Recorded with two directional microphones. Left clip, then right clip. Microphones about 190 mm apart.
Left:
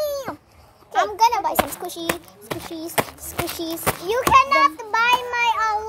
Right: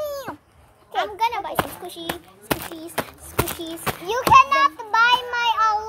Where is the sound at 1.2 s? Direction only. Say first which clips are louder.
Left 6 dB; 45° left (ahead or behind).